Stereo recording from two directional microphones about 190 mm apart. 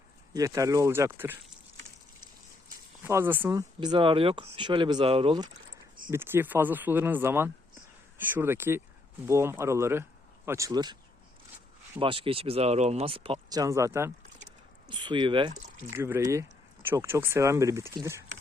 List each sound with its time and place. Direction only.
0.3 s speech: 15° right (ahead or behind)
3.0 s speech: 10° right (ahead or behind)
3.8 s speech: 25° right (ahead or behind)
6.1 s speech: 10° right (ahead or behind)
11.9 s speech: 30° right (ahead or behind)
14.8 s speech: 25° right (ahead or behind)
15.9 s speech: 10° right (ahead or behind)